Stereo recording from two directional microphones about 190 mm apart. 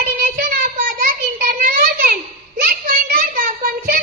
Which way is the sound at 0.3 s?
50° right (ahead or behind).